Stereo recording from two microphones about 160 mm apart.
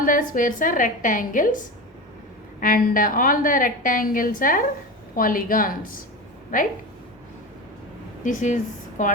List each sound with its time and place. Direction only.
0.0 s a woman's voice: 55° left (ahead or behind)
2.6 s a woman's voice: 60° left (ahead or behind)
8.2 s speech: 50° left (ahead or behind)